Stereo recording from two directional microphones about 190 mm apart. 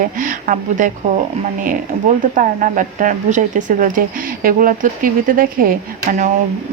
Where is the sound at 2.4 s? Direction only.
45° right (ahead or behind).